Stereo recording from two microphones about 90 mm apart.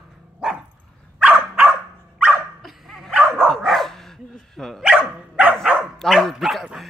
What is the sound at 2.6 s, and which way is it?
Dog, centre (ahead or behind).